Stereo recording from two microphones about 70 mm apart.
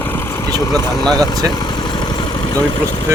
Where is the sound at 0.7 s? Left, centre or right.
Centre.